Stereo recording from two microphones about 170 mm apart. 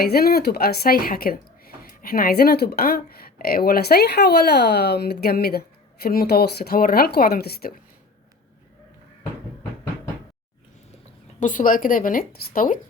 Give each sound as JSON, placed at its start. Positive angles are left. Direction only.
{"t": 0.0, "sound": "speech", "side_deg": 65}
{"t": 11.3, "sound": "speech", "side_deg": 50}